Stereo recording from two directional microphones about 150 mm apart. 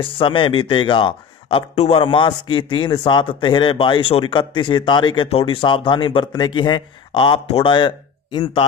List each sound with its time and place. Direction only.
0.0 s speech: 35° left (ahead or behind)